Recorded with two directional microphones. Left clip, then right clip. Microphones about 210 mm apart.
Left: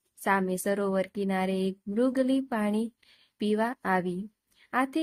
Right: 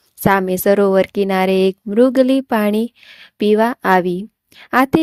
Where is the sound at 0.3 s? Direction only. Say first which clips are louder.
Right 13 dB; 45° right (ahead or behind).